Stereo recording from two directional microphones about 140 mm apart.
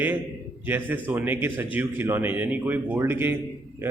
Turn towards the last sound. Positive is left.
turn(degrees=-15)  # may be behind; listen again after turning